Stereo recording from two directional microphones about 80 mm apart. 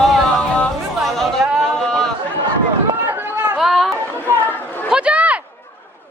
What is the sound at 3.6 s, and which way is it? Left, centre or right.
Chatter, centre.